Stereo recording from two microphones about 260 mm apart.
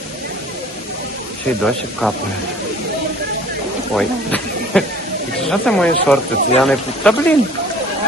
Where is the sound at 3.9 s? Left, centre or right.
Centre.